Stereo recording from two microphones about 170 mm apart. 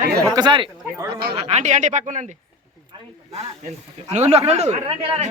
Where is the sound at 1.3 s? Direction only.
40° right (ahead or behind).